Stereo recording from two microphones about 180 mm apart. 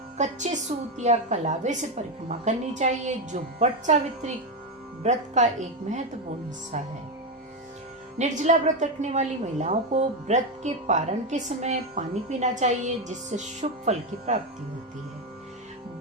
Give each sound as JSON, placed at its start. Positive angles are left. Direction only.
{"t": 0.2, "sound": "a woman's voice", "side_deg": -40}
{"t": 8.2, "sound": "a woman's voice", "side_deg": -40}